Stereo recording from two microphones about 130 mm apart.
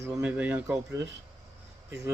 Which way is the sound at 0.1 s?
10° right (ahead or behind).